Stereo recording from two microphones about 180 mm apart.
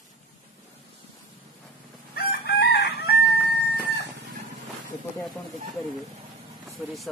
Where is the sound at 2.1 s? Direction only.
60° left (ahead or behind).